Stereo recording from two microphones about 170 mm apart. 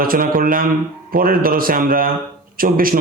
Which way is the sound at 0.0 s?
55° right (ahead or behind).